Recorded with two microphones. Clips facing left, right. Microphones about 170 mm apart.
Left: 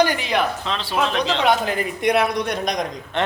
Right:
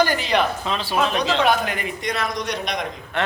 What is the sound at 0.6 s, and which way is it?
Speech, 5° right (ahead or behind).